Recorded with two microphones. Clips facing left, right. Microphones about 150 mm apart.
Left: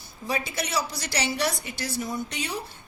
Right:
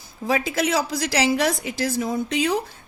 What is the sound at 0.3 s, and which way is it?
A woman's voice, 90° right.